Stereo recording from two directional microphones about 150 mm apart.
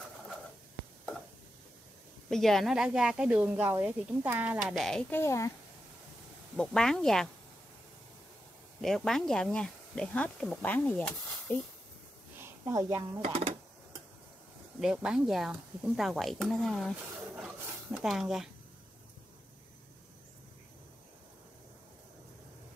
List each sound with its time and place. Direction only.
2.2 s speech: centre (ahead or behind)
5.1 s a woman's voice: 20° left (ahead or behind)
6.5 s speech: 5° left (ahead or behind)
8.8 s speech: 5° left (ahead or behind)
12.4 s speech: 20° right (ahead or behind)
13.2 s speech: 40° right (ahead or behind)
14.8 s speech: 5° right (ahead or behind)
17.9 s speech: centre (ahead or behind)